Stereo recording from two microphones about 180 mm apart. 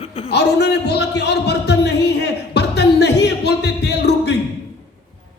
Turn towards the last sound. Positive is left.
turn(degrees=65)  # may be behind; listen again after turning